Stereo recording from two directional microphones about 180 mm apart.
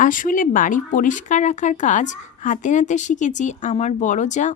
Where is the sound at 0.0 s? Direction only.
45° left (ahead or behind).